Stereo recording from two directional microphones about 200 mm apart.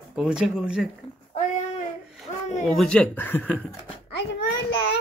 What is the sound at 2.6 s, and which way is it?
Speech, centre (ahead or behind).